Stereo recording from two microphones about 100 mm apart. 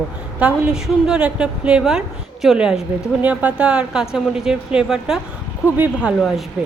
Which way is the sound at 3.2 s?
15° right (ahead or behind).